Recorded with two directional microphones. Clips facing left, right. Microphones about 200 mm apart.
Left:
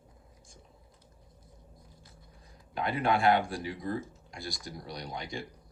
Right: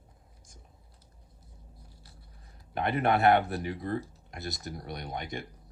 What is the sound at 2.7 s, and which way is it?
Speech, 55° right (ahead or behind).